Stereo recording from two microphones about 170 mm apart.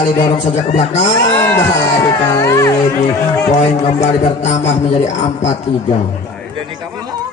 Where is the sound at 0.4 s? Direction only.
40° left (ahead or behind).